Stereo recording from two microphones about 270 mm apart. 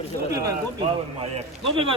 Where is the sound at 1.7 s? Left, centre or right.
Centre.